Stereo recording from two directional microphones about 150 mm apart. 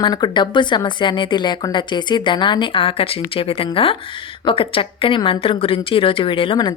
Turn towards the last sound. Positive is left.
turn(degrees=35)  # may be behind; listen again after turning